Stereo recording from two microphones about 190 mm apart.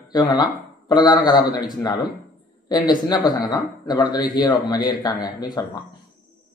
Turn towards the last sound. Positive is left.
turn(degrees=20)  # may be behind; listen again after turning